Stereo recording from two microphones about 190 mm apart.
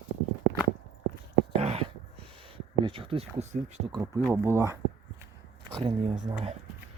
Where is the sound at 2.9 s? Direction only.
30° right (ahead or behind).